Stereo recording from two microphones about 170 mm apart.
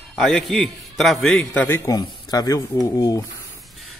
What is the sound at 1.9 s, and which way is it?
Speech, 20° left (ahead or behind).